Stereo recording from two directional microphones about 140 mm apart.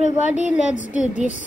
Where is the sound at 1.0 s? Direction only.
60° left (ahead or behind).